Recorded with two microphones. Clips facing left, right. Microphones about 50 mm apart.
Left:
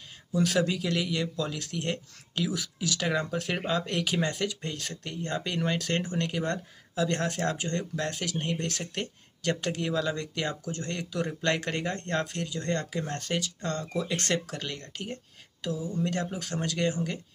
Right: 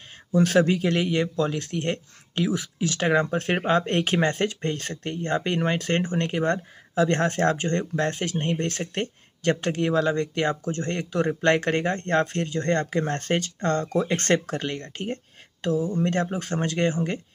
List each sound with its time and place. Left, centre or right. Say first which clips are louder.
0.3 s speech: right 6 dB; right